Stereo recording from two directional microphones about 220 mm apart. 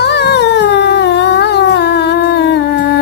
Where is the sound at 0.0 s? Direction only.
50° left (ahead or behind).